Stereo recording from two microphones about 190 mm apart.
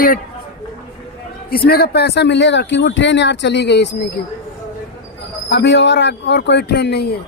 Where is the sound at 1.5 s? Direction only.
55° left (ahead or behind).